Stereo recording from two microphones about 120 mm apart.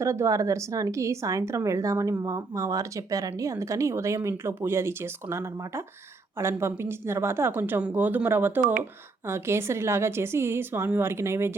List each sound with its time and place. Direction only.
0.0 s a woman's voice: 25° right (ahead or behind)